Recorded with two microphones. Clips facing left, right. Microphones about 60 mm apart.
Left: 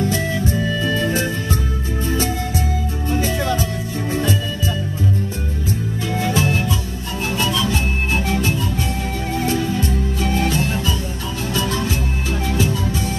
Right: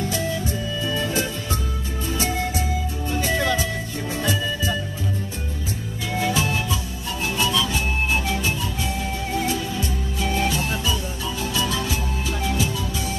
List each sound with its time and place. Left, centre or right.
0.1 s music: left
6.2 s music: left